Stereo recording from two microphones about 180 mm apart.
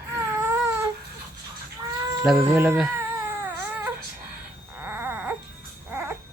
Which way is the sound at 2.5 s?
10° right (ahead or behind).